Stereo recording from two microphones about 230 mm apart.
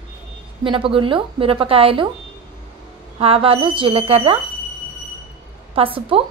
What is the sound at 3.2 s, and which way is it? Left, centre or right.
A woman's voice, right.